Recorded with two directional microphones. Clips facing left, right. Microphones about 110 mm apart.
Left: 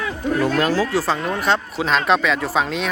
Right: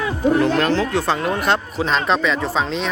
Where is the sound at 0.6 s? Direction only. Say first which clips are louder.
Even; 5° left (ahead or behind).